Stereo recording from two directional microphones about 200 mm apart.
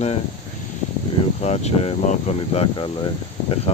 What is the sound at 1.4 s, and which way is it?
Speech, 35° left (ahead or behind).